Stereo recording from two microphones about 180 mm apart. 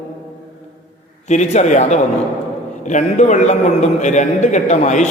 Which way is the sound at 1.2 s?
40° left (ahead or behind).